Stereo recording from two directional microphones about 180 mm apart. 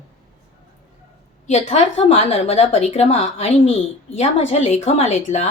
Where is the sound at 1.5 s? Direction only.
35° left (ahead or behind).